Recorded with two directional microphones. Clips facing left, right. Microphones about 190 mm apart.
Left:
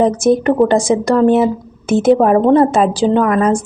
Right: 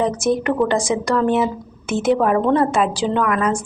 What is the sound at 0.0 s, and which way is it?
Speech, 35° left (ahead or behind).